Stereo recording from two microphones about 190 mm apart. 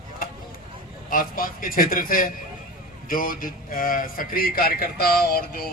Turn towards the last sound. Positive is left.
turn(degrees=50)  # may be behind; listen again after turning